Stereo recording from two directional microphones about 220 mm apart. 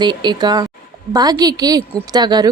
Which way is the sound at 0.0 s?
20° right (ahead or behind).